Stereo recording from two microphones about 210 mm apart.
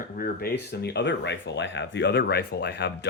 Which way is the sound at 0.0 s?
45° left (ahead or behind).